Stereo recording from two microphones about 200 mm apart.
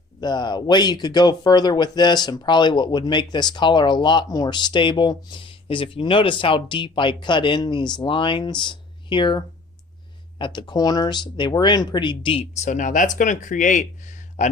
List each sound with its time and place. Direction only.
0.2 s speech: 20° left (ahead or behind); by 14.5 s 35° left (ahead or behind)